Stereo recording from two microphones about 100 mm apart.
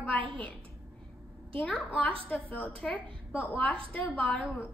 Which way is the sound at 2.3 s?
15° left (ahead or behind).